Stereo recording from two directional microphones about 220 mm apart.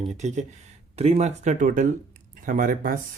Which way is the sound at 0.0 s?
30° right (ahead or behind).